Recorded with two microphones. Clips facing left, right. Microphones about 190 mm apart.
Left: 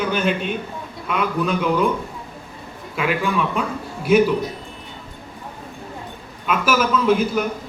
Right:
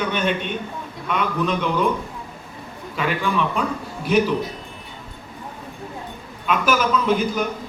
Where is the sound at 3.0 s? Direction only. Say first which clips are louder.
Left 1 dB; 5° left (ahead or behind).